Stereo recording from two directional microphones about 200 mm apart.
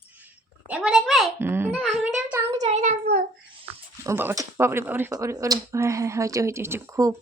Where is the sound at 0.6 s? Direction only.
5° right (ahead or behind).